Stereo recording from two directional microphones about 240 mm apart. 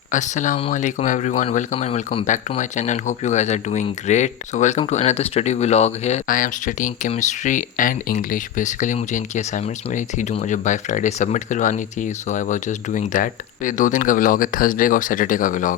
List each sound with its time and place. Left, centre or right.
0.1 s speech: left